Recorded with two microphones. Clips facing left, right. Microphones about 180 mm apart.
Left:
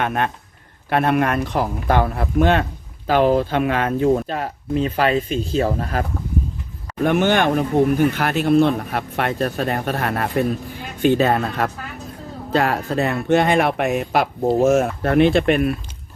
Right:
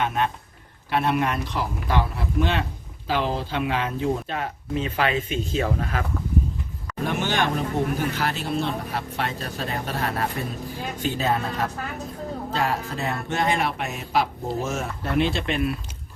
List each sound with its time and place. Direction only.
0.0 s a man's voice: 60° left (ahead or behind)
4.3 s speech: 40° left (ahead or behind)
7.0 s speech: 60° left (ahead or behind)